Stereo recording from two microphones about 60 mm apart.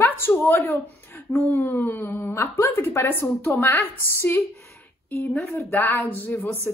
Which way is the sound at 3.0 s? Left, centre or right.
Left.